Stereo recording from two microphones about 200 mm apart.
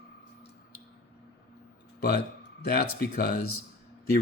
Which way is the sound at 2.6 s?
50° left (ahead or behind).